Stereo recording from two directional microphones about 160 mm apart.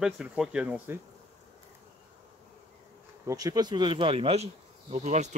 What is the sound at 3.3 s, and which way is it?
Speech, 20° right (ahead or behind).